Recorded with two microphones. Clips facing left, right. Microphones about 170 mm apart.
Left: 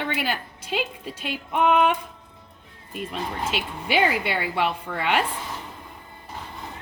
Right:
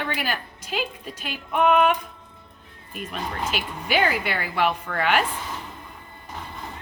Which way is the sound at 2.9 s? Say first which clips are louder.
Left 1 dB; 25° left (ahead or behind).